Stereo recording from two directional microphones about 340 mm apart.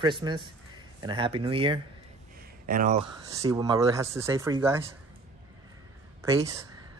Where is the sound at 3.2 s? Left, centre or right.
Centre.